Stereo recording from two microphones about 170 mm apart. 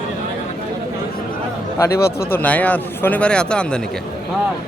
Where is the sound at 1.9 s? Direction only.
70° left (ahead or behind).